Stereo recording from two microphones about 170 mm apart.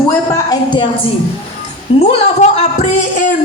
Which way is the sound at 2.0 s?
40° left (ahead or behind).